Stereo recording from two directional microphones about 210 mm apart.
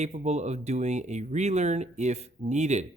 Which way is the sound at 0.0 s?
35° right (ahead or behind).